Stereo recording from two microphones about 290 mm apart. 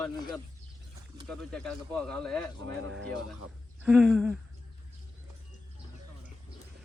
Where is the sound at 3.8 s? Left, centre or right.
Centre.